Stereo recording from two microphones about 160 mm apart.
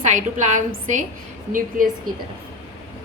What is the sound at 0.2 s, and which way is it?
Speech, 50° right (ahead or behind).